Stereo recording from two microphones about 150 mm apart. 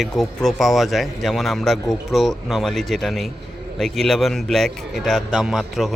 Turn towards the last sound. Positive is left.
turn(degrees=0)  # may be behind; listen again after turning